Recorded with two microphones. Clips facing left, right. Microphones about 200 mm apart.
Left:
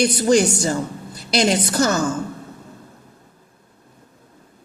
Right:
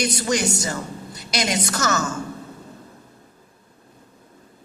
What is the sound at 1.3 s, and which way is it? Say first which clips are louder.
Speech: left 6 dB; 30° left (ahead or behind).